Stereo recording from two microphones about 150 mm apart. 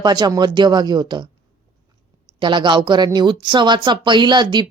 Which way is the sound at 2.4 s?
30° right (ahead or behind).